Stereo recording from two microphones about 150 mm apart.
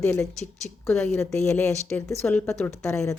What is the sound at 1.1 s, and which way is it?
Speech, 20° left (ahead or behind).